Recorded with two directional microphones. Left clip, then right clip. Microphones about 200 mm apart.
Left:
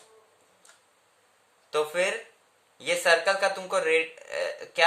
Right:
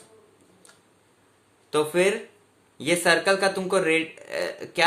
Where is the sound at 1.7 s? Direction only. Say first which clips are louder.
Right 4 dB; 15° right (ahead or behind).